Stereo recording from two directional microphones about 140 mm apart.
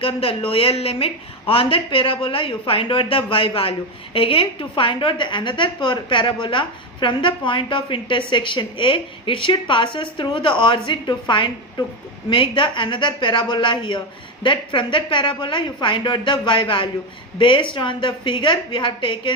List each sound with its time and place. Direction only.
0.0 s a woman's voice: 40° left (ahead or behind)